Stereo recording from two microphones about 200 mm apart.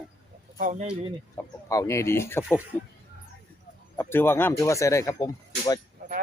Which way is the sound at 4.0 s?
10° left (ahead or behind).